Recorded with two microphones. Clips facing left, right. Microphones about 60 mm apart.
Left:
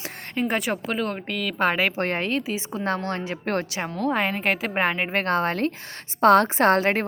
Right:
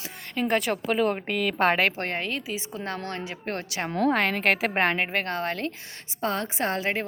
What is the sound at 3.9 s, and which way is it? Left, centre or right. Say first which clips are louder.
A woman's voice: right 1 dB; centre.